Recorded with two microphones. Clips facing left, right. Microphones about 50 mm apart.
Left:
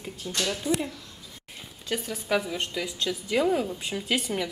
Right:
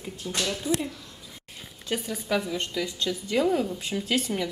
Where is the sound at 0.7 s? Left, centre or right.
Left.